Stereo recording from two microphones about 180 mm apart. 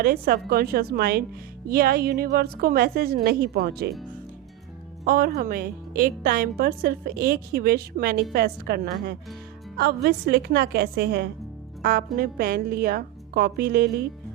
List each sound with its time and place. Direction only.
0.0 s a woman's voice: 55° right (ahead or behind)
5.0 s a woman's voice: 55° right (ahead or behind)
11.8 s a woman's voice: 55° right (ahead or behind)